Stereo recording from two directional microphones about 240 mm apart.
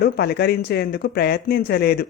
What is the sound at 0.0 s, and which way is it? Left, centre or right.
Speech, left.